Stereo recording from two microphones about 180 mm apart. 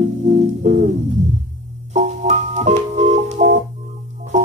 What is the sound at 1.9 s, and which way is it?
Organ, 35° right (ahead or behind).